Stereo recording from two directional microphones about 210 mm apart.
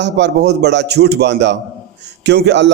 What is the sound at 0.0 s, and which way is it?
A man's voice, 55° right (ahead or behind).